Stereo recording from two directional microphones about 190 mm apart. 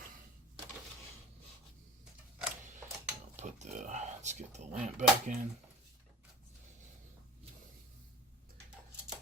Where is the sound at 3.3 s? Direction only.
35° right (ahead or behind).